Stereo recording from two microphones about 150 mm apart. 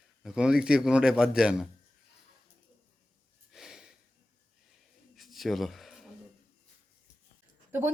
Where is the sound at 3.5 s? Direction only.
5° right (ahead or behind).